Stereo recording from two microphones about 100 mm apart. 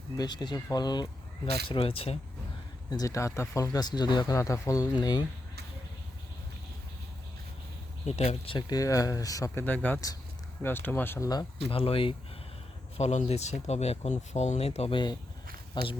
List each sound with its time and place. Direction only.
0.2 s speech: 45° left (ahead or behind)
1.6 s speech: 60° left (ahead or behind)
2.9 s speech: 35° left (ahead or behind)
8.0 s speech: 90° left
8.5 s speech: 35° left (ahead or behind)
9.6 s speech: 20° left (ahead or behind)
11.2 s speech: 40° left (ahead or behind)
11.7 s speech: 65° left (ahead or behind)
13.0 s speech: 90° left
15.7 s speech: 55° left (ahead or behind)